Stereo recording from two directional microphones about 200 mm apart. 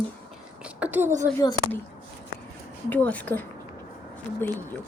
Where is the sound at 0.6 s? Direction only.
10° right (ahead or behind).